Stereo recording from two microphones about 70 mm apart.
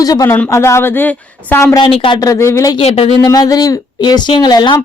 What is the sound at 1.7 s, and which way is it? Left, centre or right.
Speech, left.